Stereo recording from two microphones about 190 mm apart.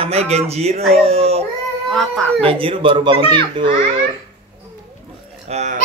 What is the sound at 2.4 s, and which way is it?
Speech, 30° right (ahead or behind).